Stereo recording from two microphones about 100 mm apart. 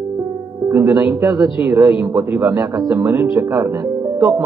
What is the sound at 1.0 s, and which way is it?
A man's voice, 20° right (ahead or behind).